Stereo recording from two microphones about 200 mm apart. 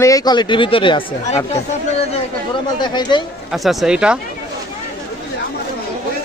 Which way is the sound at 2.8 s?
20° left (ahead or behind).